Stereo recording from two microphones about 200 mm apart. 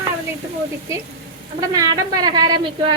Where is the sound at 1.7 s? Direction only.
20° right (ahead or behind).